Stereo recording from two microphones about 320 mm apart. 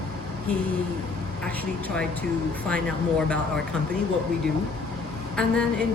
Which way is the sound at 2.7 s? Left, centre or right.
Centre.